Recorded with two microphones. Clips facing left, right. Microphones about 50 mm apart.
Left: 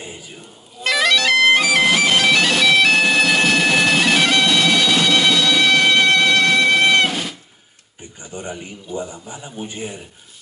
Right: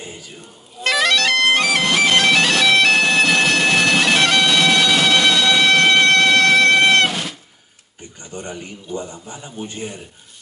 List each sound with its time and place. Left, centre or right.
0.0 s music: centre
0.8 s bagpipes: centre
8.0 s a sound: centre
9.3 s a man's voice: centre